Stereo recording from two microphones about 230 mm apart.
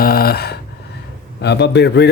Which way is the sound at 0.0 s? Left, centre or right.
Left.